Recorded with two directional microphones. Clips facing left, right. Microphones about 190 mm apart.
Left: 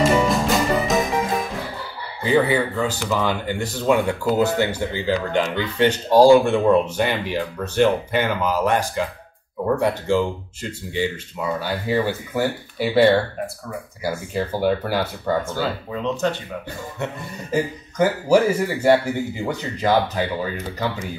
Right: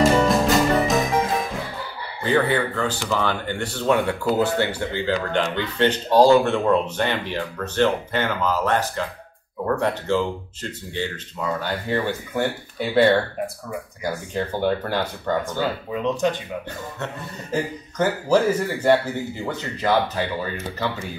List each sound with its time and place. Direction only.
0.0 s music: centre (ahead or behind)
2.2 s speech: 10° left (ahead or behind)
14.0 s speech: 10° left (ahead or behind)
15.9 s speech: 15° right (ahead or behind)
17.0 s speech: 10° left (ahead or behind)